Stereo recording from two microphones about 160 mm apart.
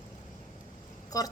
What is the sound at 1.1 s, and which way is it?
Speech, 20° left (ahead or behind).